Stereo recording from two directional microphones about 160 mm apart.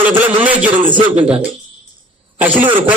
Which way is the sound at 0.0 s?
10° right (ahead or behind).